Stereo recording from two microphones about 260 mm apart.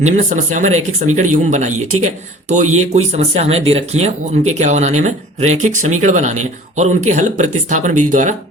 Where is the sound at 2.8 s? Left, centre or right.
Right.